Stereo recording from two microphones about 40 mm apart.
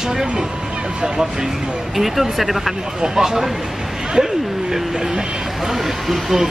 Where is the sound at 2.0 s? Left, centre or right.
Centre.